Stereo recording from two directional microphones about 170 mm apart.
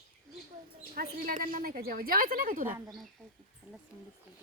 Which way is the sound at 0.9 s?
55° right (ahead or behind).